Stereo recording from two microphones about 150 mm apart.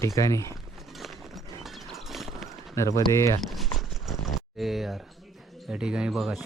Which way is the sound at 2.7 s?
20° left (ahead or behind).